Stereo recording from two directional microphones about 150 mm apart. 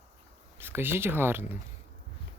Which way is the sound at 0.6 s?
15° right (ahead or behind).